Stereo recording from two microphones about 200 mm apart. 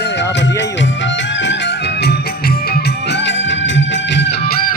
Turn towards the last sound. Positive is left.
turn(degrees=55)  # may be behind; listen again after turning